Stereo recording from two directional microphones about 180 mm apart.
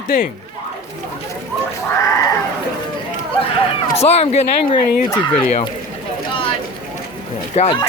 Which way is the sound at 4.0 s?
35° left (ahead or behind).